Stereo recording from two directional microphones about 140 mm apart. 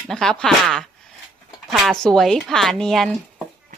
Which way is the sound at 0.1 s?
5° left (ahead or behind).